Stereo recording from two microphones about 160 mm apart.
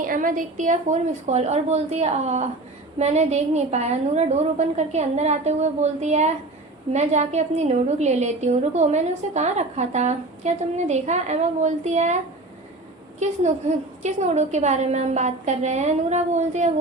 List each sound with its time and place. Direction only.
0.0 s a woman's voice: 55° right (ahead or behind)
13.1 s a woman's voice: 45° right (ahead or behind)